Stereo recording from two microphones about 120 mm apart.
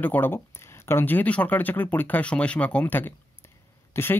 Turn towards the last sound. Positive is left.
turn(degrees=20)  # may be behind; listen again after turning